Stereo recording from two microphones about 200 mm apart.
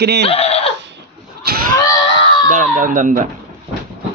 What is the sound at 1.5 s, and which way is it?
Screaming, 50° right (ahead or behind).